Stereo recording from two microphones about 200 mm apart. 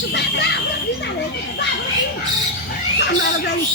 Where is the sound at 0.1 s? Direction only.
60° left (ahead or behind).